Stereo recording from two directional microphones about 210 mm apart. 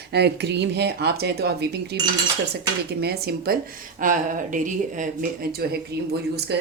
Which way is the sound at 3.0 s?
50° right (ahead or behind).